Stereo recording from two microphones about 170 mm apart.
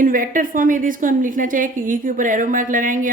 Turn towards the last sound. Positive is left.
turn(degrees=-50)  # may be behind; listen again after turning